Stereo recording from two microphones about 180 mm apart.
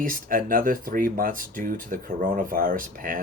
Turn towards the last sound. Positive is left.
turn(degrees=-50)  # may be behind; listen again after turning